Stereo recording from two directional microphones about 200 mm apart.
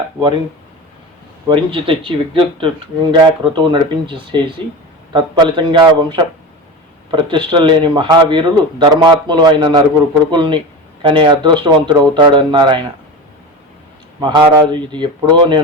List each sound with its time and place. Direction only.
1.5 s a man's voice: 25° right (ahead or behind)
14.2 s a man's voice: 20° right (ahead or behind)